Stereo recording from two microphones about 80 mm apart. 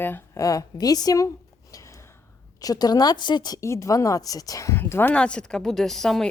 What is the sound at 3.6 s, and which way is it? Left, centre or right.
A woman's voice, left.